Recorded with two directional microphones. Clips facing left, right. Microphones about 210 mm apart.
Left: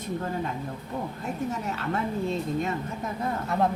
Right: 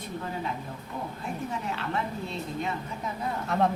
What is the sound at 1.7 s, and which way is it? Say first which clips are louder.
Speech: left 2 dB; 40° left (ahead or behind).